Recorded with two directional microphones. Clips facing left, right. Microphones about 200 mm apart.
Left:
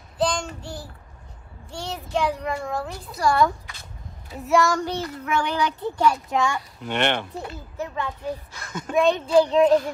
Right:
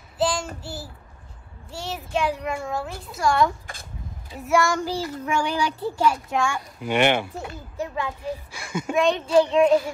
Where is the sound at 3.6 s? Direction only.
50° right (ahead or behind).